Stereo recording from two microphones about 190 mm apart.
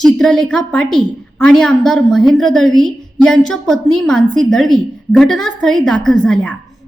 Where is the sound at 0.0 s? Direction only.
Centre (ahead or behind).